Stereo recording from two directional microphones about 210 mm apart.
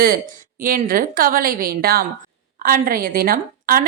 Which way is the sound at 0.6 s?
40° right (ahead or behind).